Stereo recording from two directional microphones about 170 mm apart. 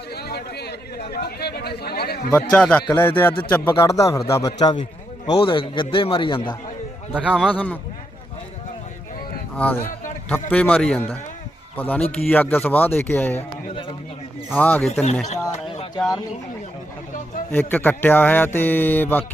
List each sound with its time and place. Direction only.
0.1 s speech: 70° left (ahead or behind)
2.3 s a man's voice: 5° left (ahead or behind)
5.2 s a man's voice: 30° left (ahead or behind)
7.1 s a man's voice: 5° right (ahead or behind)
7.4 s speech: 10° left (ahead or behind)
9.6 s a man's voice: 10° left (ahead or behind)
14.5 s speech: 10° left (ahead or behind)
16.0 s a man's voice: centre (ahead or behind)
17.5 s speech: 10° left (ahead or behind)